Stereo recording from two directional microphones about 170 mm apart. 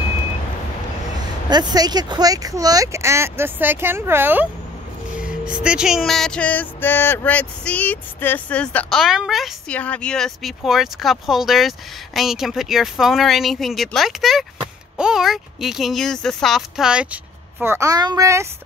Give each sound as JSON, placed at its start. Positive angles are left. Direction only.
{"t": 1.5, "sound": "speech", "side_deg": -25}
{"t": 5.2, "sound": "music", "side_deg": -5}